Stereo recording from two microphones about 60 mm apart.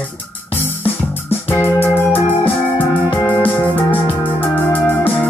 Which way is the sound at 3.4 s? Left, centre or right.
Left.